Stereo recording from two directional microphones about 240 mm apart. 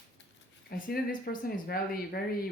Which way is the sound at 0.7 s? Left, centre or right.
Left.